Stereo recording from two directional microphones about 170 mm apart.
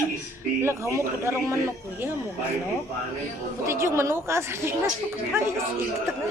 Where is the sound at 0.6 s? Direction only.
15° right (ahead or behind).